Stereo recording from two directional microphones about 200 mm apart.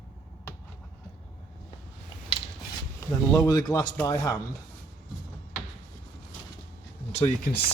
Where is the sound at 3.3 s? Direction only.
15° left (ahead or behind).